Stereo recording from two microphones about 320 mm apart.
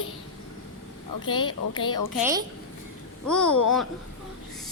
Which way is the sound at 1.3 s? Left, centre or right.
Centre.